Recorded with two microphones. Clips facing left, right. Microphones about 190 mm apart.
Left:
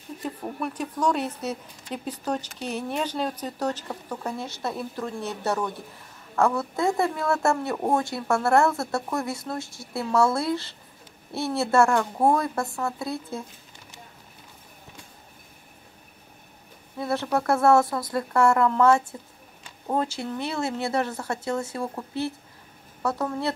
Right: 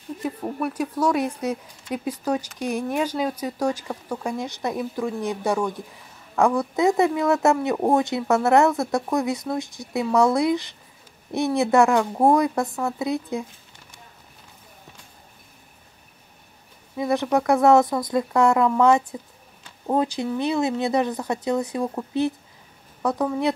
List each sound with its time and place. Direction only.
0.2 s a woman's voice: 10° right (ahead or behind)
16.9 s a woman's voice: 15° right (ahead or behind)